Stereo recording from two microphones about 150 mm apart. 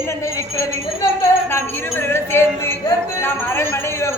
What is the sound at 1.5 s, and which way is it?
Music, 15° left (ahead or behind).